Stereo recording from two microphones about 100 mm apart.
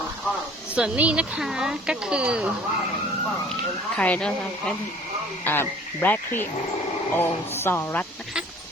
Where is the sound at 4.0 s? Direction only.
10° left (ahead or behind).